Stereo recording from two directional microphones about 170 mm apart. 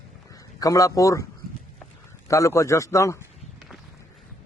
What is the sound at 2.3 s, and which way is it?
Speech, 20° left (ahead or behind).